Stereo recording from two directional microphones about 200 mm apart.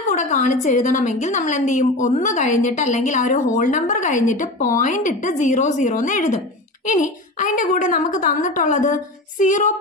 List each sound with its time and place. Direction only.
0.1 s a woman's voice: 40° left (ahead or behind)